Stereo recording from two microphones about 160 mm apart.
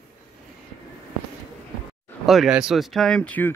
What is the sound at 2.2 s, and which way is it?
Speech, centre (ahead or behind).